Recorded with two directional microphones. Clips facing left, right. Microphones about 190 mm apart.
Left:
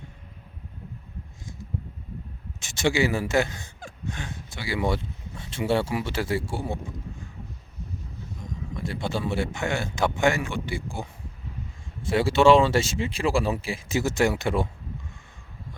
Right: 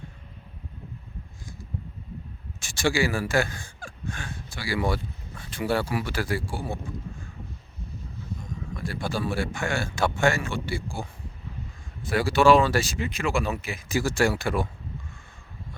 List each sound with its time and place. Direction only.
2.6 s speech: 20° left (ahead or behind)
8.7 s speech: 20° left (ahead or behind)